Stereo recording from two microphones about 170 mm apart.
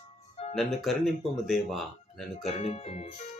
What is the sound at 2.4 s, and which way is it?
Speech, 40° left (ahead or behind).